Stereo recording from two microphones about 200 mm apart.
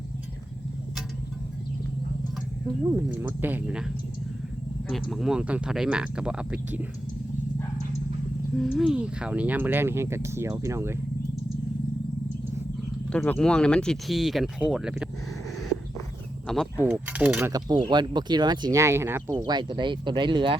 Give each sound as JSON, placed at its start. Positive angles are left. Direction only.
{"t": 2.9, "sound": "speech", "side_deg": -10}
{"t": 8.5, "sound": "speech", "side_deg": 0}
{"t": 13.1, "sound": "speech", "side_deg": 5}
{"t": 16.5, "sound": "speech", "side_deg": 0}
{"t": 16.8, "sound": "speech", "side_deg": -10}